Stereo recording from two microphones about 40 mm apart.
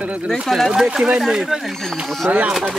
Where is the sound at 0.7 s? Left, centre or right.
Centre.